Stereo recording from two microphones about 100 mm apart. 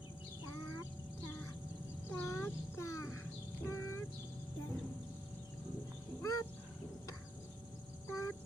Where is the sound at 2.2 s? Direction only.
25° left (ahead or behind).